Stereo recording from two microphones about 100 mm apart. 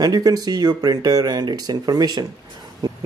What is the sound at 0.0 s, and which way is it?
Speech, 40° right (ahead or behind).